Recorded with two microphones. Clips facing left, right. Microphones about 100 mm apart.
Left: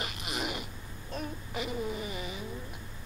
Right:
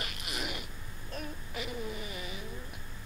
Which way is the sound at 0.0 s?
35° left (ahead or behind).